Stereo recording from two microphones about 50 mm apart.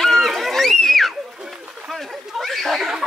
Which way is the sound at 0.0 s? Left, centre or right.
Centre.